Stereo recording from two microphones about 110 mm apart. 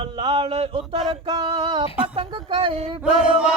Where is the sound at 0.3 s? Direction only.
65° right (ahead or behind).